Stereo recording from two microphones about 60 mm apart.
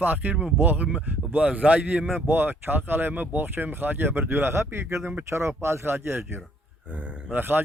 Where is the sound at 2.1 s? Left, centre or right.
Right.